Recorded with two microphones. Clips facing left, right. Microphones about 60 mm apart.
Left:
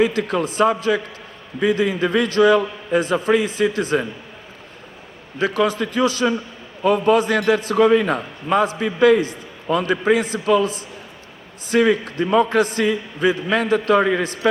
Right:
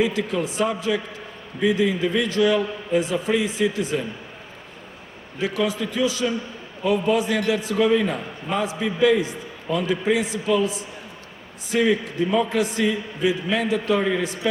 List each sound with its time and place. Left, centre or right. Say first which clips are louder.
0.0 s a man's voice: left 4 dB; left
5.4 s a man's voice: left 4 dB; left